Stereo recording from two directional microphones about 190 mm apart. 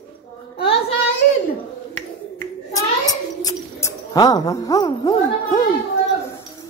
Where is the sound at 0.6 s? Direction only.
30° left (ahead or behind).